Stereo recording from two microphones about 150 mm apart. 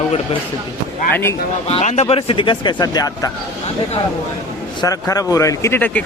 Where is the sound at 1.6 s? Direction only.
45° left (ahead or behind); by 3.3 s 25° left (ahead or behind).